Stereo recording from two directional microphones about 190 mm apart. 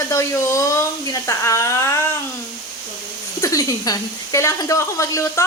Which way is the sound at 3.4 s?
15° left (ahead or behind).